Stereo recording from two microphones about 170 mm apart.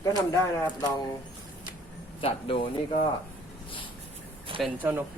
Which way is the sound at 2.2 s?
35° left (ahead or behind).